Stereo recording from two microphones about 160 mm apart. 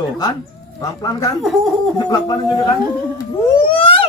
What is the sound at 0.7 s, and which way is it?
Speech, 20° left (ahead or behind).